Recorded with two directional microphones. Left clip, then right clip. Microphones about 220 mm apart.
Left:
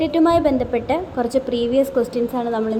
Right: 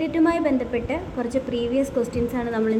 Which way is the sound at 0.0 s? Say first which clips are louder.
Left 5 dB; 10° left (ahead or behind).